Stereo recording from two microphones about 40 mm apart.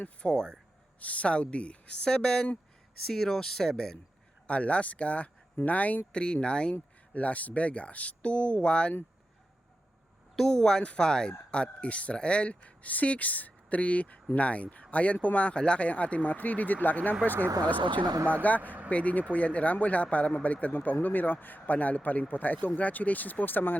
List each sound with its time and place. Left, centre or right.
0.2 s speech: left
0.9 s speech: left
3.1 s speech: centre
4.4 s speech: left
6.1 s speech: left
7.1 s speech: left
10.3 s speech: centre; by 23.7 s left